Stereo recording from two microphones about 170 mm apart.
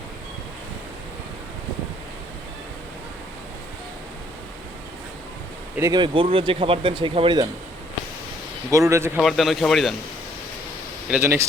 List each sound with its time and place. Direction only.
5.9 s speech: 30° right (ahead or behind)
8.7 s speech: 15° right (ahead or behind)
9.1 s speech: centre (ahead or behind)
11.1 s speech: 15° right (ahead or behind)